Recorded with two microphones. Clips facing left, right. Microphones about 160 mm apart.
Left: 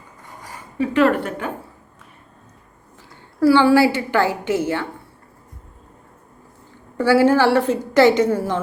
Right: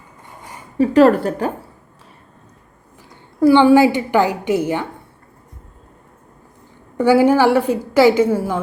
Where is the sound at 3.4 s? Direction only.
20° right (ahead or behind).